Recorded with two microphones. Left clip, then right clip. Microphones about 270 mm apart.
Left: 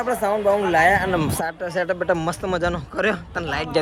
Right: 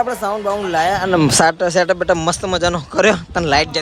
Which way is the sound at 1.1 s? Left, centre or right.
Right.